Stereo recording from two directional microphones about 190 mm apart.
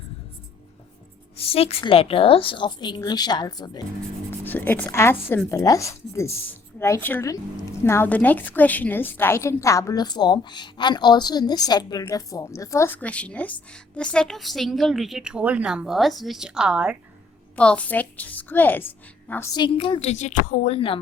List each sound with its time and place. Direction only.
1.4 s a woman's voice: 30° left (ahead or behind)
4.3 s speech: 10° left (ahead or behind); by 17.0 s 5° right (ahead or behind)
17.6 s speech: 5° left (ahead or behind)
19.5 s a woman's voice: 25° left (ahead or behind)